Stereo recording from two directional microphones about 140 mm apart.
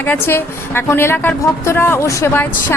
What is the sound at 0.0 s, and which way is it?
A woman's voice, 15° left (ahead or behind).